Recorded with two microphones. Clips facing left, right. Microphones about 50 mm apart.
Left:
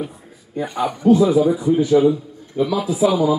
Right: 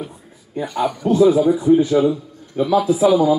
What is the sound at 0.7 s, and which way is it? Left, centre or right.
Speech, left.